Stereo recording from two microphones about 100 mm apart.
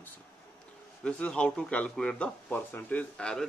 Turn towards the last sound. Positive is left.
turn(degrees=10)  # may be behind; listen again after turning